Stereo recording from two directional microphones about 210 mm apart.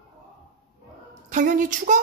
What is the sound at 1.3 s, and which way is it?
Speech, 40° right (ahead or behind).